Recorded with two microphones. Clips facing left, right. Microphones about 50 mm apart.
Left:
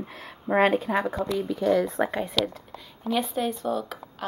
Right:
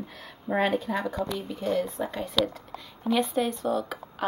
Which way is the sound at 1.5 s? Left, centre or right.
Left.